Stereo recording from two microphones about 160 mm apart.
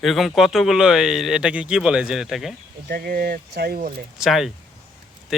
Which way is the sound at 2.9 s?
70° right (ahead or behind).